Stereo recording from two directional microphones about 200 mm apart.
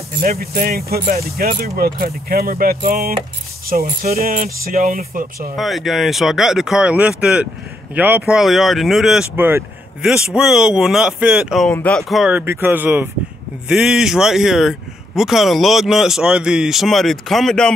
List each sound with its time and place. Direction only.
0.2 s speech: 50° right (ahead or behind)
5.6 s speech: centre (ahead or behind)